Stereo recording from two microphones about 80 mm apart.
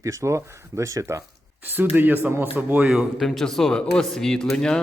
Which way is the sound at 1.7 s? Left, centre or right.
Right.